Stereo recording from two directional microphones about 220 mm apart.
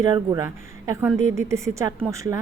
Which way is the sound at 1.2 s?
35° left (ahead or behind).